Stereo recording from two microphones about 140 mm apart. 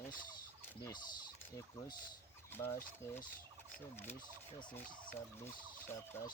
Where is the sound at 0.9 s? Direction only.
30° left (ahead or behind).